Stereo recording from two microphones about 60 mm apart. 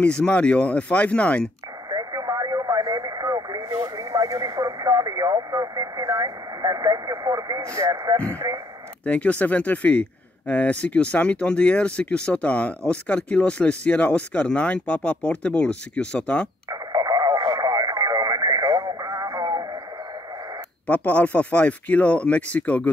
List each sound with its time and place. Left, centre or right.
0.0 s speech: centre
2.0 s radio: right
7.6 s speech: right
8.5 s speech: right
9.0 s speech: left
16.9 s radio: right
20.8 s speech: left